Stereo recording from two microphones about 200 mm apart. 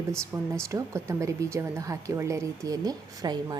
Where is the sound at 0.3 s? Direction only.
15° right (ahead or behind).